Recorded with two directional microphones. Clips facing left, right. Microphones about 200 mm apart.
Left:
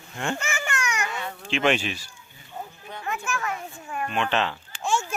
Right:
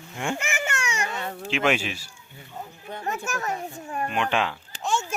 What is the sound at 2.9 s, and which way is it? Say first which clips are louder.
A child's voice: right 1 dB; 40° right (ahead or behind).